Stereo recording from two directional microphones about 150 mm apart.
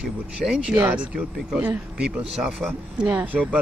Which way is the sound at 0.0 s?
5° right (ahead or behind).